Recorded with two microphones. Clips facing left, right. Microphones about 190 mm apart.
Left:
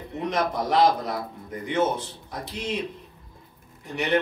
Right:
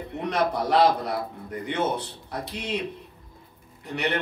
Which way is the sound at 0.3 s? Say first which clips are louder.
Right 2 dB; 65° right (ahead or behind).